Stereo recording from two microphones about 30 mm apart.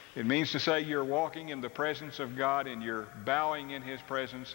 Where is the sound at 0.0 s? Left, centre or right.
Left.